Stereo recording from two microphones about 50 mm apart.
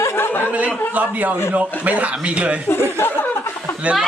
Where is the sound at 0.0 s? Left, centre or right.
Left.